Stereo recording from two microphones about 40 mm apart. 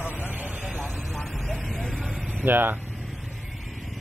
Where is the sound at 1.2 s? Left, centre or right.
Centre.